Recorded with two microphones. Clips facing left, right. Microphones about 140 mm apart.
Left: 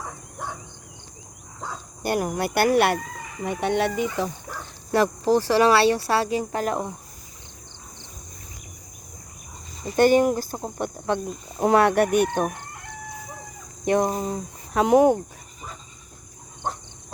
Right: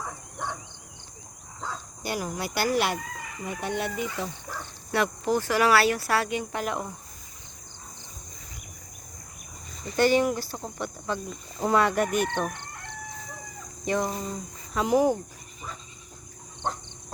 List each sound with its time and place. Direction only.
2.0 s speech: 60° left (ahead or behind)
3.6 s speech: 75° left (ahead or behind)
4.9 s speech: 35° left (ahead or behind)
9.9 s speech: 50° left (ahead or behind)
12.3 s speech: 50° left (ahead or behind)
13.8 s cricket: 55° left (ahead or behind)